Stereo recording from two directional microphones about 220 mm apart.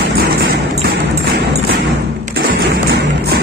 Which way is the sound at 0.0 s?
50° right (ahead or behind).